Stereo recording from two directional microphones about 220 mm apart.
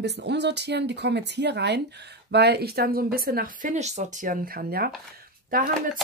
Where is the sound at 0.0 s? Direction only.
50° right (ahead or behind).